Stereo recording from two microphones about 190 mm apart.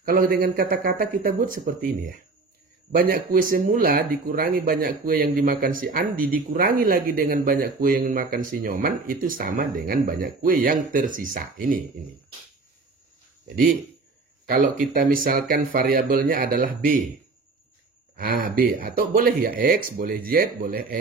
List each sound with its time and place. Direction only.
0.0 s speech: 50° right (ahead or behind)
14.5 s speech: 50° right (ahead or behind)
18.1 s speech: 50° right (ahead or behind)